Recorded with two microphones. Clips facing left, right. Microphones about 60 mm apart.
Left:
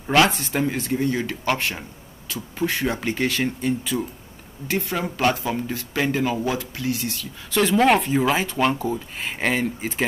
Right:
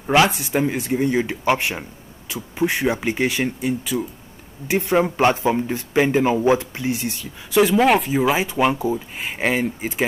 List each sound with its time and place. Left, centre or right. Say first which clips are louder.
0.0 s speech: right 1 dB; centre
4.6 s speech: right 7 dB; right
7.5 s speech: right 2 dB; centre